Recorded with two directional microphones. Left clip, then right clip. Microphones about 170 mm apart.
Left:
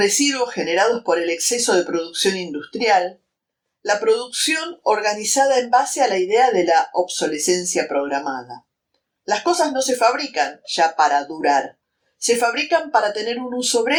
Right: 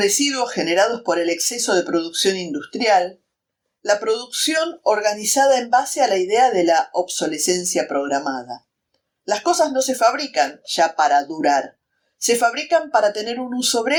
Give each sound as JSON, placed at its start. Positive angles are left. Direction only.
{"t": 0.0, "sound": "speech", "side_deg": -40}